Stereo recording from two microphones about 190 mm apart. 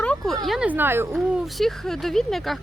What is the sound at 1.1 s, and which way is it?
Speech, centre (ahead or behind).